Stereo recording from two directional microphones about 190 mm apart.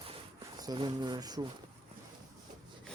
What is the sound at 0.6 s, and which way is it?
Speech, 20° right (ahead or behind).